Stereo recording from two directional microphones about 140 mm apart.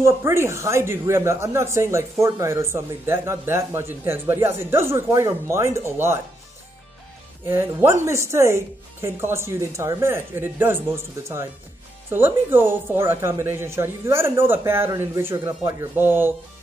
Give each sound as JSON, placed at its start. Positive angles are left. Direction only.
{"t": 0.0, "sound": "speech", "side_deg": -20}
{"t": 7.4, "sound": "speech", "side_deg": -15}